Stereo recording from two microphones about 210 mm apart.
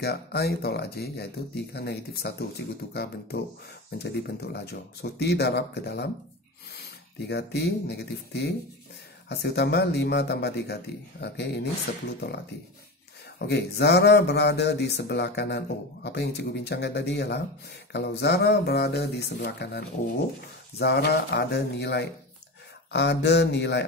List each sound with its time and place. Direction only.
0.0 s speech: 50° left (ahead or behind)
13.5 s speech: 50° left (ahead or behind)
20.8 s speech: 50° left (ahead or behind)